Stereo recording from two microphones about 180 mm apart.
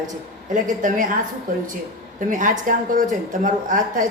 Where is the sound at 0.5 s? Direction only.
45° right (ahead or behind).